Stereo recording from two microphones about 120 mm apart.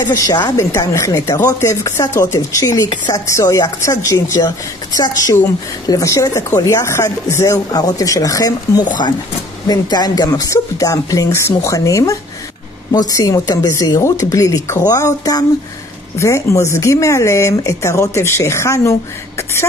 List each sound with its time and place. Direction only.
0.0 s speech: 30° left (ahead or behind)